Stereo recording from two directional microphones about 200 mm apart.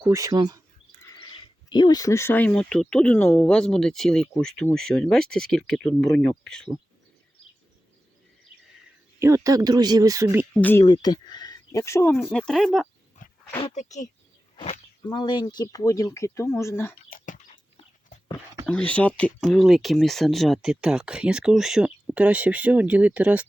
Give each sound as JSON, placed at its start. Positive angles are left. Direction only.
{"t": 0.0, "sound": "speech", "side_deg": -15}
{"t": 1.7, "sound": "speech", "side_deg": 20}
{"t": 9.1, "sound": "speech", "side_deg": -15}
{"t": 10.5, "sound": "speech", "side_deg": 10}
{"t": 10.8, "sound": "speech", "side_deg": 20}
{"t": 12.3, "sound": "speech", "side_deg": 5}
{"t": 13.2, "sound": "wild animals", "side_deg": 40}
{"t": 13.7, "sound": "speech", "side_deg": 35}
{"t": 17.1, "sound": "bird", "side_deg": 45}
{"t": 18.6, "sound": "speech", "side_deg": 5}